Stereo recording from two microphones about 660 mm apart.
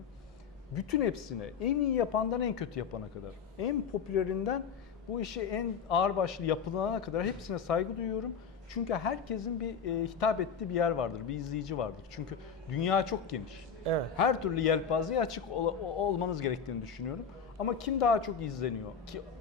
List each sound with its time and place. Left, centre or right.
0.8 s a man's voice: left
3.6 s a man's voice: left